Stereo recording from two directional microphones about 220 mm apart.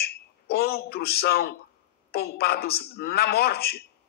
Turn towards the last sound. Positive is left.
turn(degrees=45)  # may be behind; listen again after turning